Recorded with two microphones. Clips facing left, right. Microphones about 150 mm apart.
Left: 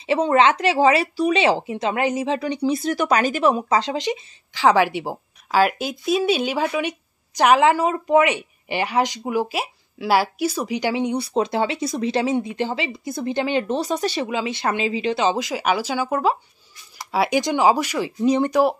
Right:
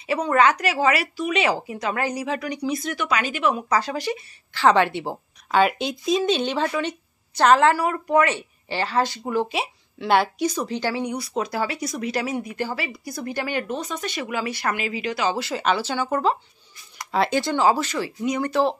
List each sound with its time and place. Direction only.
0.0 s speech: 25° left (ahead or behind)
3.7 s a woman's voice: 20° left (ahead or behind)
13.7 s a woman's voice: 35° left (ahead or behind); by 18.1 s 15° left (ahead or behind)
18.2 s speech: 30° left (ahead or behind)
18.5 s a woman's voice: 10° left (ahead or behind)